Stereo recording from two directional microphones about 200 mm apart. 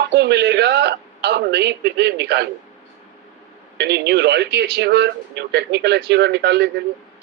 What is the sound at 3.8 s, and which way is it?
Speech, 55° right (ahead or behind).